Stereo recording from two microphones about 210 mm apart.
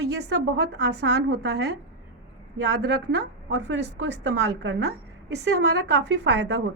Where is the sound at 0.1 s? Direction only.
55° right (ahead or behind).